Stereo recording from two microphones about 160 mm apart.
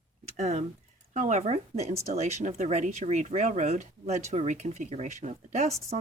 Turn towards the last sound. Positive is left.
turn(degrees=-45)  # may be behind; listen again after turning